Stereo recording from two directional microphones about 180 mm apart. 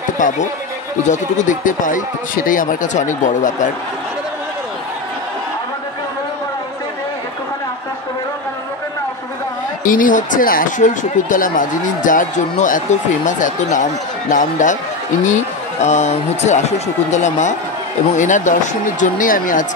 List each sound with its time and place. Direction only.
0.2 s speech: 45° left (ahead or behind)
9.8 s speech: 50° left (ahead or behind)